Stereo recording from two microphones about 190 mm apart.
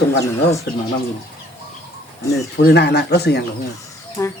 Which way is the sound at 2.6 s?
60° left (ahead or behind).